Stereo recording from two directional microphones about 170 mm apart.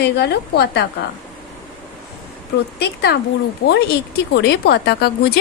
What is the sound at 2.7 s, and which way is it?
Speech, 75° left (ahead or behind).